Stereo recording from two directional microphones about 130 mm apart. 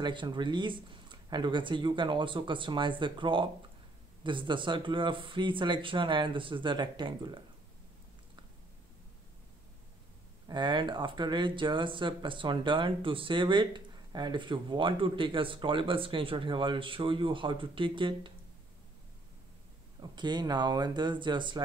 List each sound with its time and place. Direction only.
0.0 s speech: 35° right (ahead or behind)
10.5 s speech: 35° right (ahead or behind)
20.0 s speech: 35° right (ahead or behind)